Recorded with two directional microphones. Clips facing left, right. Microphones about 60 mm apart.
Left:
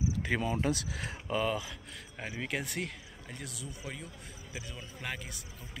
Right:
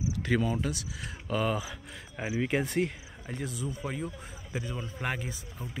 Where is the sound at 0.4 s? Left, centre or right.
Left.